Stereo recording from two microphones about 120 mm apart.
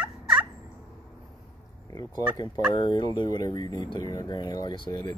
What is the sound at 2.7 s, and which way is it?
Speech, 40° left (ahead or behind).